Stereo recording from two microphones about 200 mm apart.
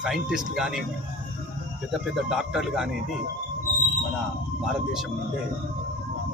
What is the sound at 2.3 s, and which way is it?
Speech, centre (ahead or behind).